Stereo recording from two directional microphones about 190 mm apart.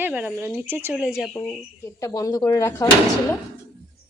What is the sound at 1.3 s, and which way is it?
Speech, 10° left (ahead or behind).